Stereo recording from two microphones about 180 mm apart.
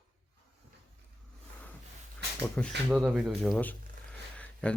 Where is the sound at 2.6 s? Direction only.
10° left (ahead or behind).